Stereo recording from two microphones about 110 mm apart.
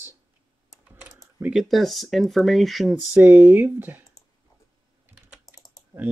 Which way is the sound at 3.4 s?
15° right (ahead or behind).